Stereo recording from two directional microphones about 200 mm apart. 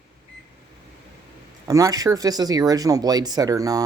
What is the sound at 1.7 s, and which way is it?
Speech, 15° right (ahead or behind).